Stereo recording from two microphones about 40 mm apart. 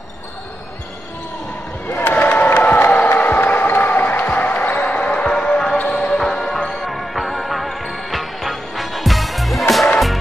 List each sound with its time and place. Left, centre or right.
2.0 s crowd: left
3.4 s music: left
4.6 s basketball bounce: left
4.8 s basketball bounce: left
5.2 s music: centre
5.9 s basketball bounce: left
6.1 s music: centre